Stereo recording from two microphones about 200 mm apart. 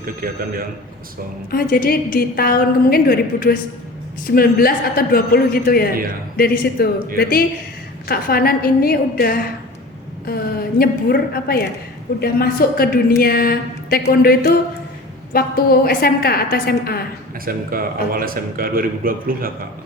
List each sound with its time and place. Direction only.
0.0 s a man's voice: 45° right (ahead or behind)
1.5 s a woman's voice: 45° left (ahead or behind)
17.4 s a man's voice: 45° right (ahead or behind)